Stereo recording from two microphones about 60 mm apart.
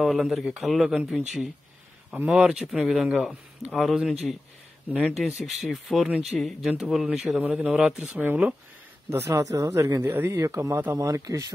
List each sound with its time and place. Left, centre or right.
0.0 s a man's voice: centre
2.7 s a man's voice: centre
7.3 s a man's voice: centre
9.1 s speech: right
9.9 s speech: right
10.3 s speech: right